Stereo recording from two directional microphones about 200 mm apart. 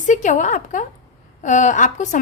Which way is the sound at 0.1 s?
40° left (ahead or behind).